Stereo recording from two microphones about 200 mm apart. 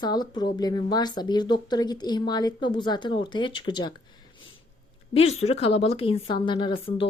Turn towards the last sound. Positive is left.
turn(degrees=25)  # may be behind; listen again after turning